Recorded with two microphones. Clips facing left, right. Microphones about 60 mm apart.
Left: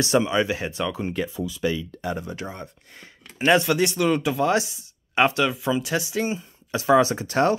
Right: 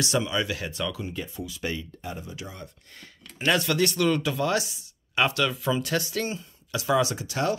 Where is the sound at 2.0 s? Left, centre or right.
Left.